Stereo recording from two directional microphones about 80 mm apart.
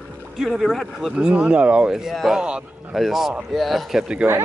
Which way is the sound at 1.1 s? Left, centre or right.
Centre.